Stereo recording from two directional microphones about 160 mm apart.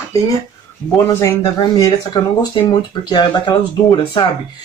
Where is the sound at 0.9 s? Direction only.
20° left (ahead or behind).